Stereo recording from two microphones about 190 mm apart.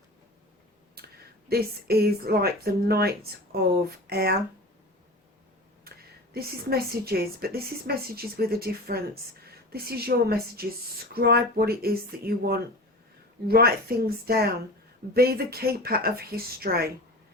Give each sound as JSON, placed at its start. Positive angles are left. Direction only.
{"t": 1.0, "sound": "a sound", "side_deg": -55}
{"t": 1.5, "sound": "speech", "side_deg": -55}
{"t": 6.3, "sound": "a woman's voice", "side_deg": -55}